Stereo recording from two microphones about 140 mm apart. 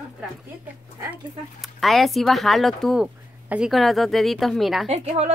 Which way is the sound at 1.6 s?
Centre (ahead or behind).